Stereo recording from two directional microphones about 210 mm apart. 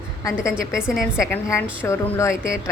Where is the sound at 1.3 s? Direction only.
10° left (ahead or behind).